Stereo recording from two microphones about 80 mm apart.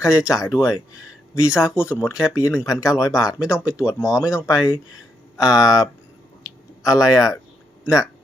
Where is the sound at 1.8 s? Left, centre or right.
Left.